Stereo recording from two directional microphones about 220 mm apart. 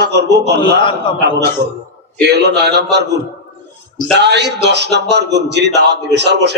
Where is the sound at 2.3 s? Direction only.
50° right (ahead or behind).